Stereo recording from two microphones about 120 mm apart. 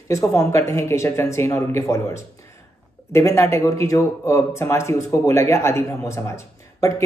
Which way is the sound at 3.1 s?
25° left (ahead or behind).